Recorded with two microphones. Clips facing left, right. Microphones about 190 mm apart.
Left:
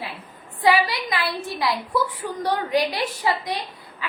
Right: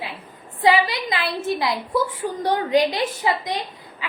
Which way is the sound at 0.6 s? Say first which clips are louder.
Right 1 dB; 20° right (ahead or behind).